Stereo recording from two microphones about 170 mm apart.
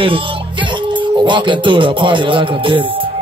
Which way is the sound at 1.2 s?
30° right (ahead or behind).